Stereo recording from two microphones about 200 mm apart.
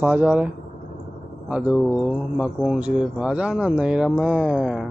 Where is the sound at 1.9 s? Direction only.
10° left (ahead or behind).